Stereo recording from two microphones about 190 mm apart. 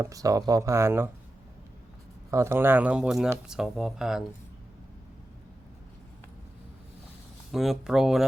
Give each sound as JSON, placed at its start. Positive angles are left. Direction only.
{"t": 0.0, "sound": "speech", "side_deg": -15}
{"t": 2.3, "sound": "speech", "side_deg": -15}
{"t": 7.5, "sound": "speech", "side_deg": 0}